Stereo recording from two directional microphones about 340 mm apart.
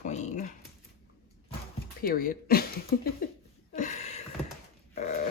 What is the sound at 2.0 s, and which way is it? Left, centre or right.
Speech, left.